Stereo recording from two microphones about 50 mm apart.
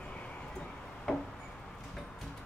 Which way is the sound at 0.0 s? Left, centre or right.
Left.